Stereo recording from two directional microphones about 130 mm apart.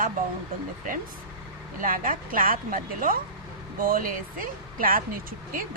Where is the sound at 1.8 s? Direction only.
90° right.